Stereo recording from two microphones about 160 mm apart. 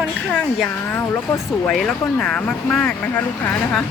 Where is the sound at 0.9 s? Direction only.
10° left (ahead or behind).